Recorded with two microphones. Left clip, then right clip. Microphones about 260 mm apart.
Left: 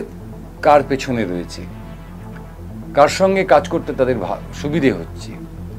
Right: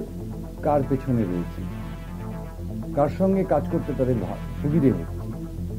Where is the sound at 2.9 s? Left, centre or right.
Centre.